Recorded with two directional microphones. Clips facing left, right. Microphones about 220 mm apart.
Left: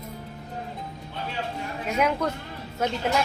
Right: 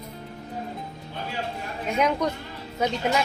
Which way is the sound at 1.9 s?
5° left (ahead or behind).